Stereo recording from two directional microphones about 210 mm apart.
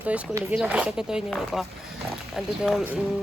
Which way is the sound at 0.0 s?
5° right (ahead or behind).